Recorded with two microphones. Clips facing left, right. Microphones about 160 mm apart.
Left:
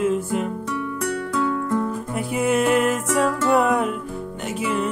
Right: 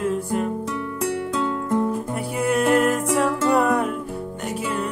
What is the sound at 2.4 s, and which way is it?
Music, 5° left (ahead or behind).